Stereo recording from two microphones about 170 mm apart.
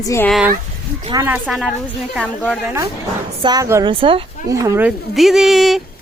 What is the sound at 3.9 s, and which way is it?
Speech, 30° right (ahead or behind).